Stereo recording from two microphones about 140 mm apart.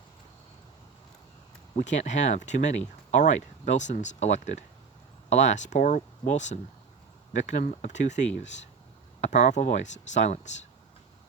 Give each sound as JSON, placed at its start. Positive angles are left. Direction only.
{"t": 1.7, "sound": "speech", "side_deg": 60}